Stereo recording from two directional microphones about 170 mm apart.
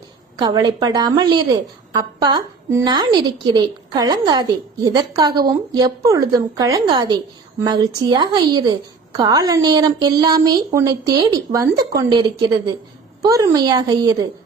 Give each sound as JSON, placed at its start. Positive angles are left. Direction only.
{"t": 0.3, "sound": "a woman's voice", "side_deg": -25}